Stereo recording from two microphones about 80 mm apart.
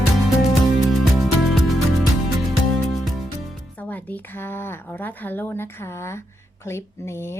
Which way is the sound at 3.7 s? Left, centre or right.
Centre.